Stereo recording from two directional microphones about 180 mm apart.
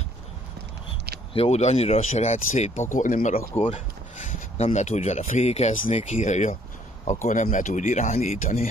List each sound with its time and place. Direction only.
1.3 s speech: 35° left (ahead or behind)